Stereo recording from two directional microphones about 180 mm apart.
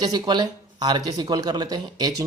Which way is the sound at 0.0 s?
25° right (ahead or behind).